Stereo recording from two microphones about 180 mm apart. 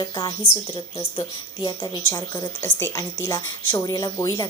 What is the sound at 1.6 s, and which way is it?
Speech, 20° left (ahead or behind).